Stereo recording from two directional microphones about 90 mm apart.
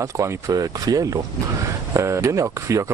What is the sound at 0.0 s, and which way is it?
Speech, 40° right (ahead or behind).